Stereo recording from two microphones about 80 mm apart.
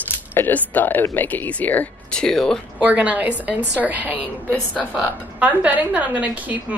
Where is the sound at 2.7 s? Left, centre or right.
Centre.